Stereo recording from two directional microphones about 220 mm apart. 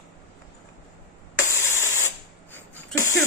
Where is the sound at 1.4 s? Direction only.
10° left (ahead or behind).